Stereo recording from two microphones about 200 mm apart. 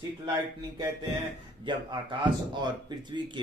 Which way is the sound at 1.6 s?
25° right (ahead or behind).